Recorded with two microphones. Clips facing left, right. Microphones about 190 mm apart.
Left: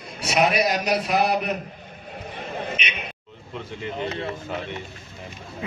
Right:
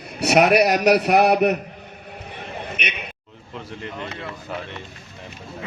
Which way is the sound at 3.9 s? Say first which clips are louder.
Left 7 dB; 30° left (ahead or behind).